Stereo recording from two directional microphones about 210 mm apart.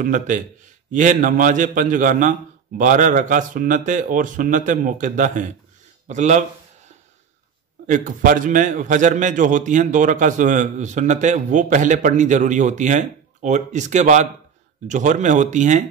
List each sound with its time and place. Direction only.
0.0 s a man's voice: 40° right (ahead or behind)
7.8 s a man's voice: 35° right (ahead or behind)